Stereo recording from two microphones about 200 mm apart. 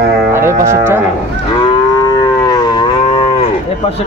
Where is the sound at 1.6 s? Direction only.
20° left (ahead or behind).